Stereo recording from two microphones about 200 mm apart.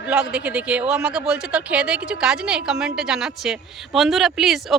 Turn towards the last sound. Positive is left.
turn(degrees=0)  # may be behind; listen again after turning